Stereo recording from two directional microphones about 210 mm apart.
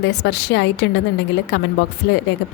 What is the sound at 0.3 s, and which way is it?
A woman's voice, 50° left (ahead or behind).